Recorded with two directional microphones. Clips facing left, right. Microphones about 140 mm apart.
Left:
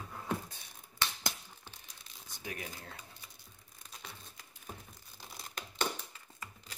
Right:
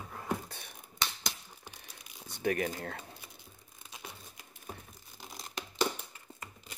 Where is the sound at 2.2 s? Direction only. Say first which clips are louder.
Right 13 dB; 65° right (ahead or behind).